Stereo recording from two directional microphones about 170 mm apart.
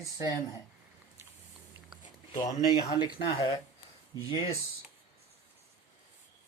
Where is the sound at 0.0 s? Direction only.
20° left (ahead or behind).